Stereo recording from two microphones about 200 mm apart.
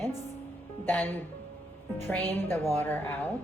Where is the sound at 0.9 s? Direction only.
10° left (ahead or behind).